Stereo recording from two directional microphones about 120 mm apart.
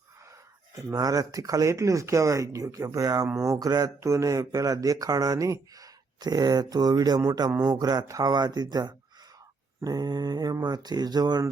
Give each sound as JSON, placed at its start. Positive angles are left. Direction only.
{"t": 0.8, "sound": "speech", "side_deg": -30}